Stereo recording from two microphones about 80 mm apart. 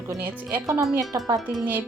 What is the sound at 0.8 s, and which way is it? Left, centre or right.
Speech, right.